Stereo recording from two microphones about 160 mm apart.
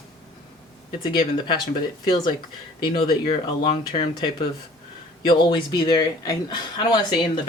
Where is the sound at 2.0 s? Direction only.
25° left (ahead or behind).